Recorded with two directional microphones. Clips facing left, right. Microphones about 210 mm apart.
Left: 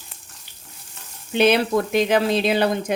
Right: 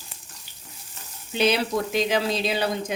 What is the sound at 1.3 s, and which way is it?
Speech, 55° left (ahead or behind).